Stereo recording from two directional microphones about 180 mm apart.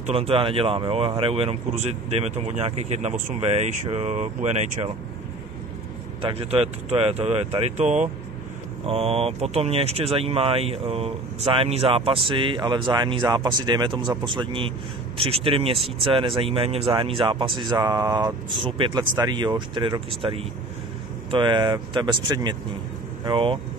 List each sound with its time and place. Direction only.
0.0 s speech: 35° right (ahead or behind)
6.2 s speech: 35° right (ahead or behind)